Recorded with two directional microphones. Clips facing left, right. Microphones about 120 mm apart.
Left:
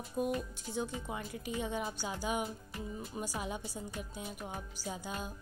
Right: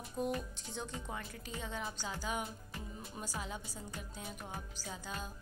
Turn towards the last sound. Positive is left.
turn(degrees=15)  # may be behind; listen again after turning